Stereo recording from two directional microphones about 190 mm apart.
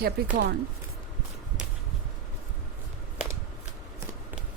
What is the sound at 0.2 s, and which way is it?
Speech, 55° right (ahead or behind).